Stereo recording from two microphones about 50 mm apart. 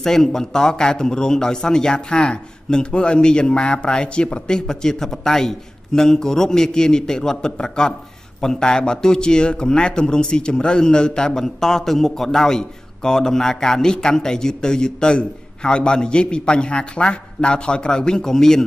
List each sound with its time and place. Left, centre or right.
0.0 s a man's voice: centre